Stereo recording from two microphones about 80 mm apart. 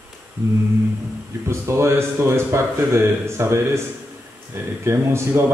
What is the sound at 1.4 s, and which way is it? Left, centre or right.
A man's voice, right.